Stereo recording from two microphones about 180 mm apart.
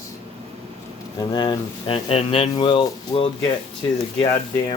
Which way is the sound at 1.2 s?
25° left (ahead or behind).